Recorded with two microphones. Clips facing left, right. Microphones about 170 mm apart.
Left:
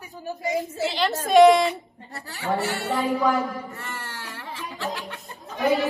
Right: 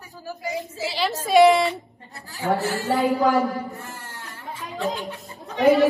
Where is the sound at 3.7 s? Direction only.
90° left.